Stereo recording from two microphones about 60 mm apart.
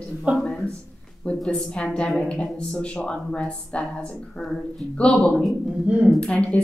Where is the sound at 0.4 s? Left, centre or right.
Centre.